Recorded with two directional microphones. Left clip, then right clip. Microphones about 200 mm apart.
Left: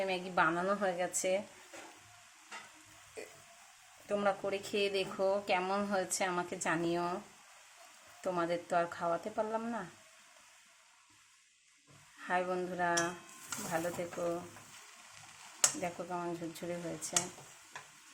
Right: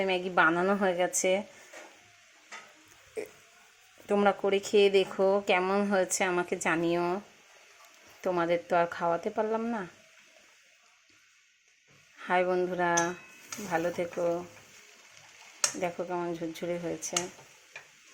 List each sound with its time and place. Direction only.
0.0 s speech: 25° right (ahead or behind)
4.1 s speech: 25° right (ahead or behind)
8.2 s speech: 25° right (ahead or behind)
12.2 s speech: 25° right (ahead or behind)
15.8 s speech: 25° right (ahead or behind)